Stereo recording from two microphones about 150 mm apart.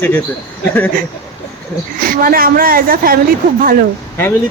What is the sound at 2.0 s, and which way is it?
A woman's voice, 75° right (ahead or behind).